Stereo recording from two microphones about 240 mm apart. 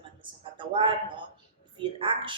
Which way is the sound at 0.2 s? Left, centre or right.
Right.